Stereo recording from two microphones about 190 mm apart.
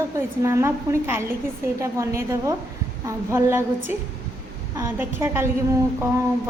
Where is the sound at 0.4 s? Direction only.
15° right (ahead or behind).